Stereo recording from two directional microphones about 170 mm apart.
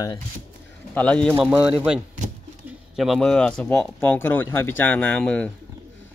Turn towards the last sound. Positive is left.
turn(degrees=5)  # may be behind; listen again after turning